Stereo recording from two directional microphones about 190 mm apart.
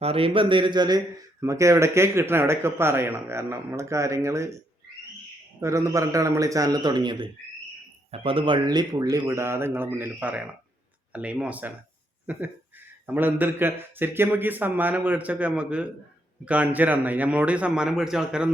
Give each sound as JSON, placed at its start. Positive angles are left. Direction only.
{"t": 0.0, "sound": "a man's voice", "side_deg": -30}
{"t": 5.5, "sound": "a man's voice", "side_deg": -15}